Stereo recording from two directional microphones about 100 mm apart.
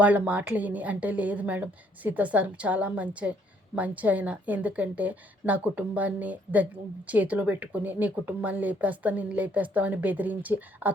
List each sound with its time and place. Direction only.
0.0 s speech: 15° right (ahead or behind)